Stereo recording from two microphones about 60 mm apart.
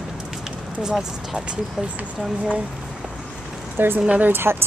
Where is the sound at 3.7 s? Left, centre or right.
Right.